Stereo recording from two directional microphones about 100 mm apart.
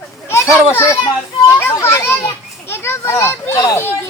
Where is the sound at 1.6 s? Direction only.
25° left (ahead or behind).